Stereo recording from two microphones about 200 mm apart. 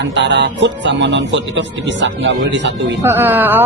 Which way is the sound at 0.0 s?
60° right (ahead or behind).